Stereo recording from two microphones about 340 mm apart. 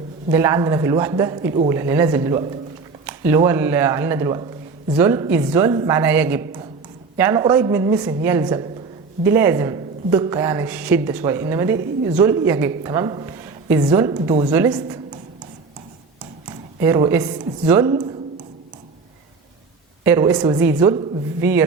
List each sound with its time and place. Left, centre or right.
0.3 s speech: centre
16.5 s a sound: centre
17.7 s speech: centre
20.1 s speech: centre